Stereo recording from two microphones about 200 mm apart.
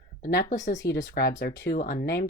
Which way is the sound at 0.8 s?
60° left (ahead or behind).